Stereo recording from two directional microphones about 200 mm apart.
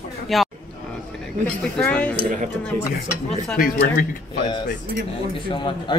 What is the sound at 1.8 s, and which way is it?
Speech, 5° left (ahead or behind).